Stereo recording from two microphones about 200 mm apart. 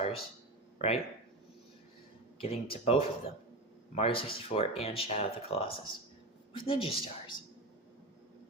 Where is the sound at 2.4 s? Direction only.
30° left (ahead or behind).